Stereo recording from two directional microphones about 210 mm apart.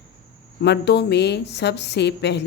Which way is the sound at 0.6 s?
55° left (ahead or behind).